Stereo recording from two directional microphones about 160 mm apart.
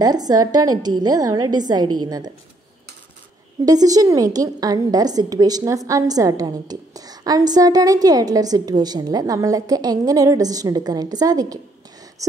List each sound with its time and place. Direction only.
0.0 s a woman's voice: 25° right (ahead or behind)
3.6 s a woman's voice: 25° right (ahead or behind)